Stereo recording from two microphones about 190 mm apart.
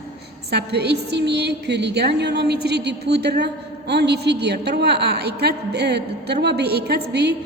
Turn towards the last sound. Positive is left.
turn(degrees=-60)  # may be behind; listen again after turning